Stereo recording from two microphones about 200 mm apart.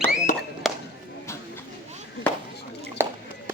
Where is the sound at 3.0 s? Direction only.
10° right (ahead or behind).